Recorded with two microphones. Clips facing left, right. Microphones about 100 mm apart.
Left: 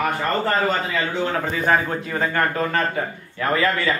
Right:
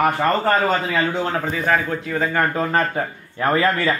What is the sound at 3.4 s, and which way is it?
Speech, 35° right (ahead or behind).